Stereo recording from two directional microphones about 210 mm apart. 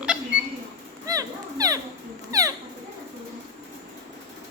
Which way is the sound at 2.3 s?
15° right (ahead or behind).